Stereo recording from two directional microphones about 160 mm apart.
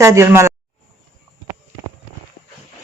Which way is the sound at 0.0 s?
15° right (ahead or behind).